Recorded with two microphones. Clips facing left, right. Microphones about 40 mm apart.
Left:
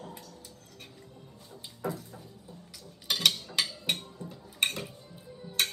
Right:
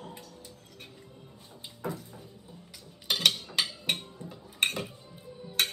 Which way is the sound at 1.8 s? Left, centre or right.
Centre.